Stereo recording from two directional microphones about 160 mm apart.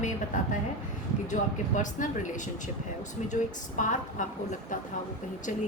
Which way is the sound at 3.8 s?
55° left (ahead or behind).